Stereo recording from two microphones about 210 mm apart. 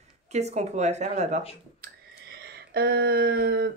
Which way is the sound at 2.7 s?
50° right (ahead or behind).